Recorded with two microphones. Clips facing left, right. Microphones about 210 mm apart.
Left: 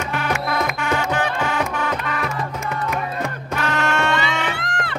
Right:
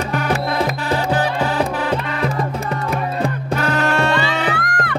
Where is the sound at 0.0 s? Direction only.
35° right (ahead or behind).